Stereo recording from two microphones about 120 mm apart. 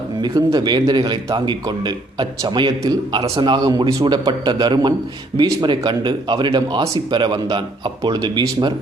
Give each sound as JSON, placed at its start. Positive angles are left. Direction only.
{"t": 0.2, "sound": "a man's voice", "side_deg": -35}